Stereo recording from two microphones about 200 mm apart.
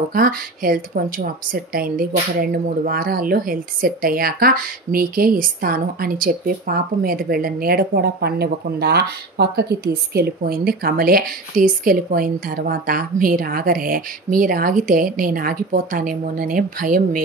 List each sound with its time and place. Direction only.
0.1 s a woman's voice: 45° right (ahead or behind)